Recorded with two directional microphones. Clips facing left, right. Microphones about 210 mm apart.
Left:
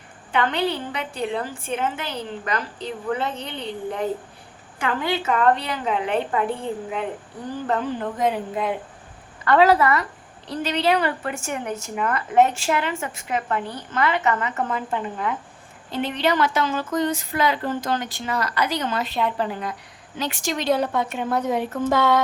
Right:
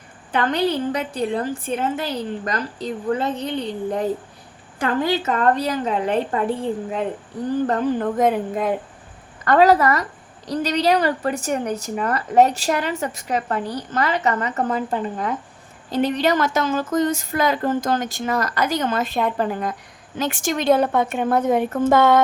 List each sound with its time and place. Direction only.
0.3 s a woman's voice: 40° right (ahead or behind)
7.7 s a woman's voice: 45° right (ahead or behind)